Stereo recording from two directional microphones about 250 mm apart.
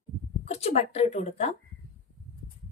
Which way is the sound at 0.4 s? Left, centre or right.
Left.